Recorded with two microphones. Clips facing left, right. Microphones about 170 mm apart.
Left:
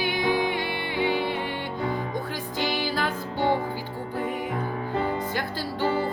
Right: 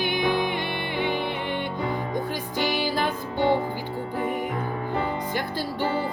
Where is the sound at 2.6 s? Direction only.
15° right (ahead or behind).